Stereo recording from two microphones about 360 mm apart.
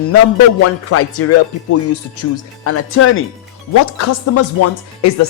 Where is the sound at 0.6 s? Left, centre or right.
Left.